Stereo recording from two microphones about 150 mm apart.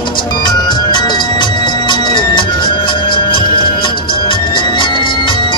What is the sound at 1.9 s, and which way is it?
Music, 30° left (ahead or behind).